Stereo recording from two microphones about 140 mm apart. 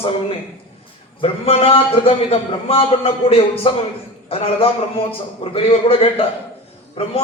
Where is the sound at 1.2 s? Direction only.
45° left (ahead or behind).